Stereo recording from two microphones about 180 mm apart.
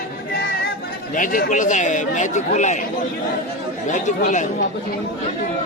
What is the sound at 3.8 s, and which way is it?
Speech, 40° left (ahead or behind).